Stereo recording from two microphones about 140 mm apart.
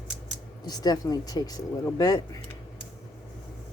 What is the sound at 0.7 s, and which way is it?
Speech, 30° left (ahead or behind).